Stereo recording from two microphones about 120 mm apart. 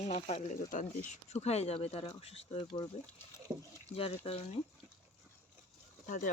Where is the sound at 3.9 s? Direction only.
55° left (ahead or behind).